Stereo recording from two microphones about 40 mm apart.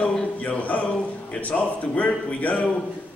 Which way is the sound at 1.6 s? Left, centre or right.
Left.